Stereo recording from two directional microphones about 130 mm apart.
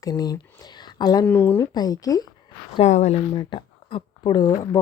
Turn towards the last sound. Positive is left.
turn(degrees=30)  # may be behind; listen again after turning